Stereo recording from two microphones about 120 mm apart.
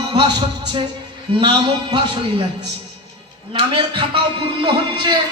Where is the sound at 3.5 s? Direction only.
40° right (ahead or behind).